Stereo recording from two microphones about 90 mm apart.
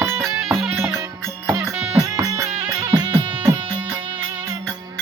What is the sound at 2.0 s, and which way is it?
Music, 40° right (ahead or behind).